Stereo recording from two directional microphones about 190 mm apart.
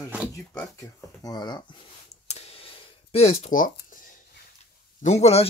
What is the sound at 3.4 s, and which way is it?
Speech, 45° left (ahead or behind).